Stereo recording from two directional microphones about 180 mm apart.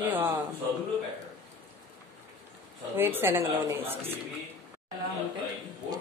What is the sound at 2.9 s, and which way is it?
Speech, 15° right (ahead or behind).